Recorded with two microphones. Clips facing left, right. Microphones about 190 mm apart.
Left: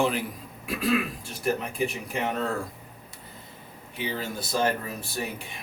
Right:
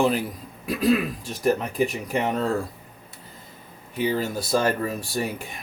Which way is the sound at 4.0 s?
45° right (ahead or behind).